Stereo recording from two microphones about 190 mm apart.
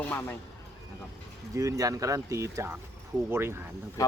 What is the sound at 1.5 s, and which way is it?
Speech, 15° right (ahead or behind).